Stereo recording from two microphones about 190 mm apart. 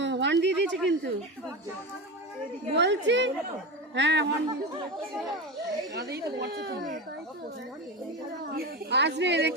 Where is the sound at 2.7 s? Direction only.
65° right (ahead or behind).